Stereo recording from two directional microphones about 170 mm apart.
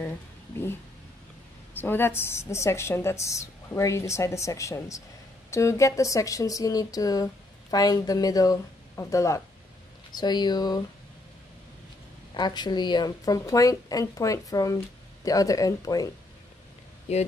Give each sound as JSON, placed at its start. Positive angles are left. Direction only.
{"t": 1.8, "sound": "a woman's voice", "side_deg": 15}
{"t": 12.4, "sound": "a woman's voice", "side_deg": 25}
{"t": 17.1, "sound": "speech", "side_deg": 40}